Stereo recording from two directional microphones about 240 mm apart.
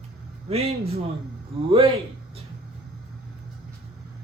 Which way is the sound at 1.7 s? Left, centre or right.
Right.